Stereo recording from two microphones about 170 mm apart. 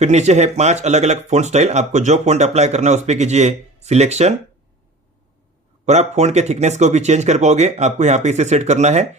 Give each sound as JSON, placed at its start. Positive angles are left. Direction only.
{"t": 0.0, "sound": "speech", "side_deg": -40}
{"t": 5.8, "sound": "speech", "side_deg": -40}